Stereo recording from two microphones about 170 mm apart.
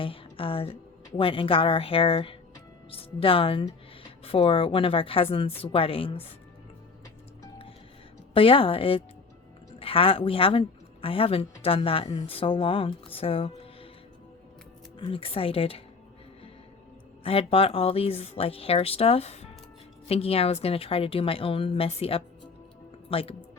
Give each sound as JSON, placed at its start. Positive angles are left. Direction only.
{"t": 0.0, "sound": "a woman's voice", "side_deg": 30}
{"t": 8.3, "sound": "a woman's voice", "side_deg": 30}
{"t": 14.9, "sound": "a woman's voice", "side_deg": 30}
{"t": 17.2, "sound": "a woman's voice", "side_deg": 35}